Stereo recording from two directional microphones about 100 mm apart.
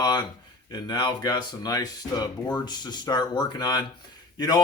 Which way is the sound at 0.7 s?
45° left (ahead or behind).